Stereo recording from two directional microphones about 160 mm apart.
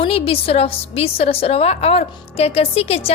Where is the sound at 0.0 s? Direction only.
35° left (ahead or behind).